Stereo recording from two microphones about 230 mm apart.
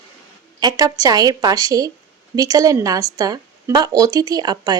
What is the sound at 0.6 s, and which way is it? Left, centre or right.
Speech, centre.